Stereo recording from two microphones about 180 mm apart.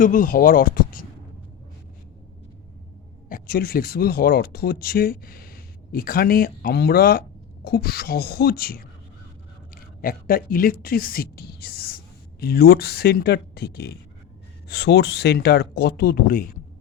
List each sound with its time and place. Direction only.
0.0 s speech: 50° left (ahead or behind)
3.2 s speech: 55° left (ahead or behind)
10.0 s speech: 55° left (ahead or behind)